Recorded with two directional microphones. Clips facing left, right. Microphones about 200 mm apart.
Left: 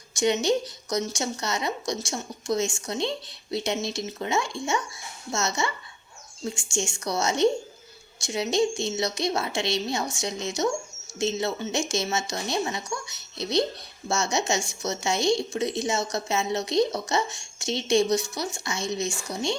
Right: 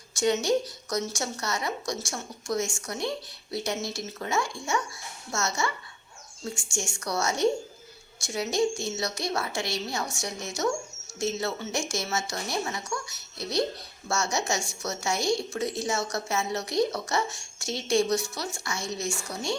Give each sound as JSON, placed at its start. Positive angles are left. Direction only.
{"t": 0.2, "sound": "a woman's voice", "side_deg": 20}